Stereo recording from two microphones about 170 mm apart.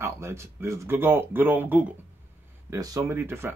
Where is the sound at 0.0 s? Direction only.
15° right (ahead or behind).